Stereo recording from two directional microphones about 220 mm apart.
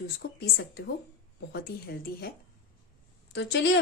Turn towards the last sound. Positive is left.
turn(degrees=50)  # may be behind; listen again after turning